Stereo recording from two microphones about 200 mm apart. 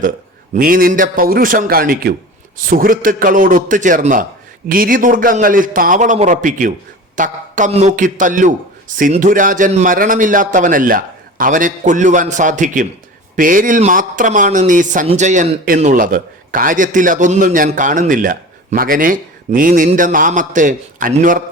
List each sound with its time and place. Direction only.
0.5 s a man's voice: 45° right (ahead or behind)